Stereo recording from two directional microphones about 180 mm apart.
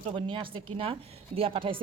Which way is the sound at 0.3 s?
30° right (ahead or behind).